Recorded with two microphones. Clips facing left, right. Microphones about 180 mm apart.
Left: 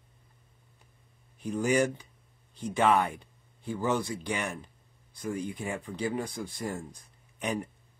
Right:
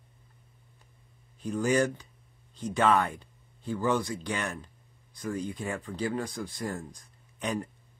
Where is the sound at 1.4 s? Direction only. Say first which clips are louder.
Even; 15° left (ahead or behind).